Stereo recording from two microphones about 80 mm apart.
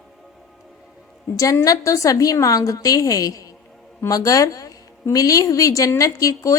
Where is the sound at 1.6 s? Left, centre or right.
Left.